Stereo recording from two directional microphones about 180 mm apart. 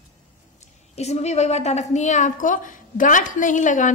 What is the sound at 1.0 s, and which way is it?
A woman's voice, 35° left (ahead or behind).